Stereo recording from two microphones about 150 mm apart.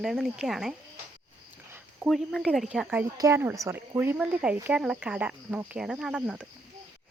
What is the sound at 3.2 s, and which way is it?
Speech, 20° right (ahead or behind).